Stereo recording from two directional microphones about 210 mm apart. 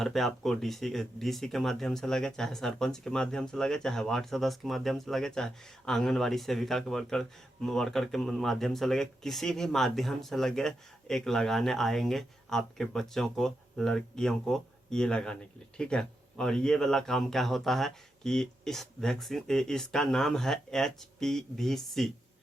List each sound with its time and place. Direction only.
0.0 s speech: centre (ahead or behind)